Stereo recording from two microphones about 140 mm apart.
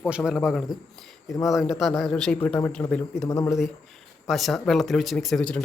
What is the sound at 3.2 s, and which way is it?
Speech, 25° left (ahead or behind).